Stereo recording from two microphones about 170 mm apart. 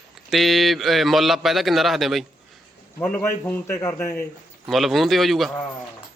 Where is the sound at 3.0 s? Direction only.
10° left (ahead or behind).